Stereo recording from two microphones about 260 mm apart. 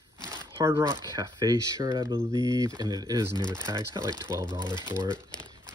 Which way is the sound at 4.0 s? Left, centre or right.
Centre.